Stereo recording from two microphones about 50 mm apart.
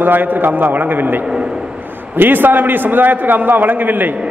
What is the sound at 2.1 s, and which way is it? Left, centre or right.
A man's voice, right.